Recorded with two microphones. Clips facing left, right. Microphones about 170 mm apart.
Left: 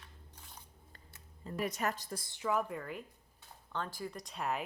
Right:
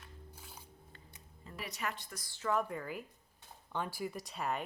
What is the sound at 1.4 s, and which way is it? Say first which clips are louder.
Speech: left 6 dB; 45° left (ahead or behind).